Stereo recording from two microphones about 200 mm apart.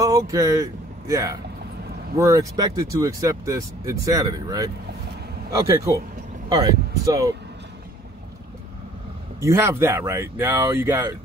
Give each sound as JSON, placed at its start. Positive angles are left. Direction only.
{"t": 0.0, "sound": "speech", "side_deg": -15}
{"t": 9.4, "sound": "speech", "side_deg": -15}